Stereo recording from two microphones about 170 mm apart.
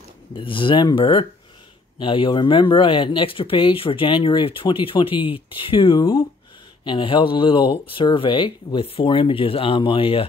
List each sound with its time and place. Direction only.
0.3 s speech: 30° left (ahead or behind)